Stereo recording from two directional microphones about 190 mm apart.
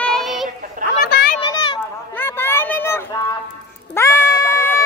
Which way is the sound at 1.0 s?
55° left (ahead or behind).